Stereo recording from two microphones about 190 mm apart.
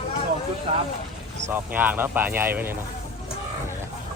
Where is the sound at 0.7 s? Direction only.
35° right (ahead or behind).